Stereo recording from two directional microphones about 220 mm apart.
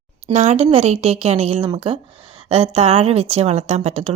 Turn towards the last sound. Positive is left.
turn(degrees=-30)  # may be behind; listen again after turning